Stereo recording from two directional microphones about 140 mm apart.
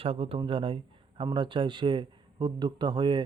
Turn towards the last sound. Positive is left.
turn(degrees=-35)  # may be behind; listen again after turning